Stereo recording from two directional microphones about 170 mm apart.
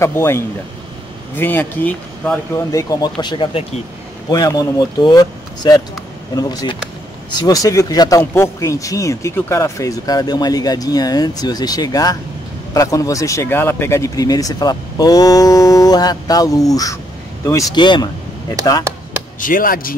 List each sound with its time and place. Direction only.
0.0 s speech: 15° left (ahead or behind)
19.4 s speech: 55° left (ahead or behind)